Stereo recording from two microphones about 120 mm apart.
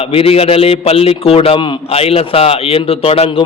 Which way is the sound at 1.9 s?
55° left (ahead or behind).